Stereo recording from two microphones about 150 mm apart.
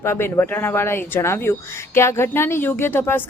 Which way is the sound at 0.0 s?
15° left (ahead or behind).